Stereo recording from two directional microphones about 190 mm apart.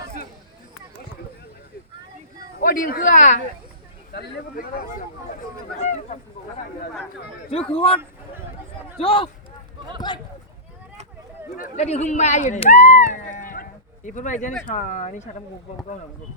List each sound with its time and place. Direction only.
2.6 s speech: 50° left (ahead or behind)
4.1 s speech: 60° left (ahead or behind)
5.8 s speech: 35° left (ahead or behind)
7.5 s speech: 30° left (ahead or behind)
9.0 s speech: 30° left (ahead or behind)
11.5 s speech: 40° left (ahead or behind)
13.3 s a sound: 45° left (ahead or behind)
14.7 s speech: 40° left (ahead or behind)